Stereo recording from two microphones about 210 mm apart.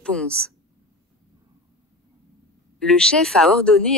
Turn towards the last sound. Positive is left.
turn(degrees=5)  # may be behind; listen again after turning